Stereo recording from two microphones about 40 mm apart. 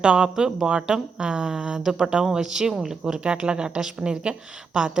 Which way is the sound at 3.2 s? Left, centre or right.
Right.